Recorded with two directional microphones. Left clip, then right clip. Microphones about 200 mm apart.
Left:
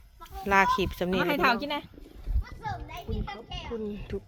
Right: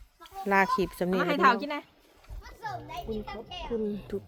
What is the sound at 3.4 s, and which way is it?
Speech, 25° right (ahead or behind).